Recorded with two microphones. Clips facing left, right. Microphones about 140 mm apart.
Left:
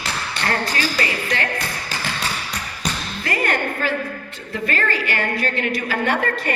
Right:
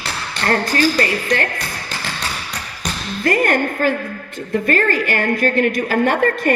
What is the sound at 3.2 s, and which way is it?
A woman's voice, 45° right (ahead or behind).